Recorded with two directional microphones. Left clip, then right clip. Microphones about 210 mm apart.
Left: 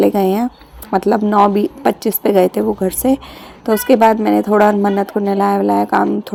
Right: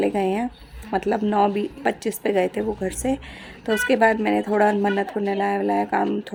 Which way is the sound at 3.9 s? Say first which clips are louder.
Left 8 dB; 15° left (ahead or behind).